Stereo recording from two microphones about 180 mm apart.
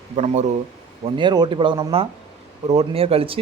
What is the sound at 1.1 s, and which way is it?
Speech, 25° right (ahead or behind).